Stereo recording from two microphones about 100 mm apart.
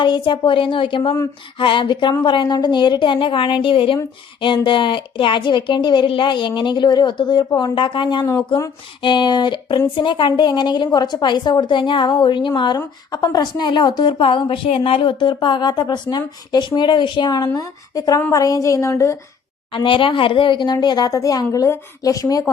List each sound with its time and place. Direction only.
0.0 s a woman's voice: 50° left (ahead or behind); by 19.1 s 30° left (ahead or behind)
19.7 s speech: 60° left (ahead or behind); by 22.4 s 35° left (ahead or behind)